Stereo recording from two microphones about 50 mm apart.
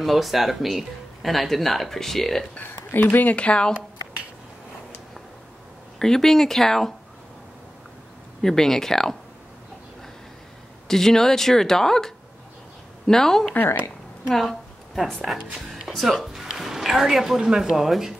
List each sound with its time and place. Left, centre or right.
0.0 s speech: centre
2.9 s speech: left
3.3 s speech: left
5.9 s speech: centre
8.4 s speech: centre
10.9 s speech: centre
14.3 s a sound: centre
15.5 s speech: centre